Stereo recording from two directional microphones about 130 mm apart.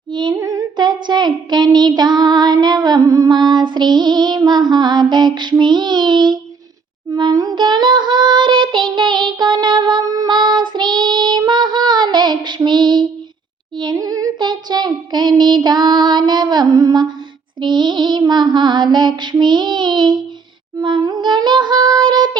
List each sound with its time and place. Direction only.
0.1 s female singing: 35° right (ahead or behind)
0.3 s female singing: 25° right (ahead or behind)
1.0 s child singing: 35° right (ahead or behind)
13.7 s a sound: 30° right (ahead or behind)
17.6 s music: 35° right (ahead or behind)
20.7 s a sound: 30° right (ahead or behind)